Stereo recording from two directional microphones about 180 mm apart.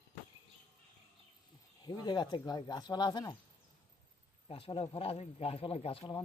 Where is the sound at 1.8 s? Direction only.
25° left (ahead or behind).